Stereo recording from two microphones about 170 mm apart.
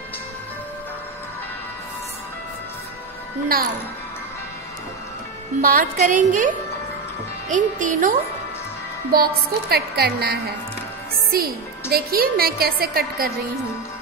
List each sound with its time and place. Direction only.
5.6 s a woman's voice: 55° right (ahead or behind)
9.1 s a woman's voice: 65° right (ahead or behind)